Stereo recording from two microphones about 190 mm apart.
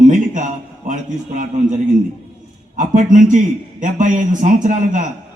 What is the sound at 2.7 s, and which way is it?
A man's voice, 40° right (ahead or behind).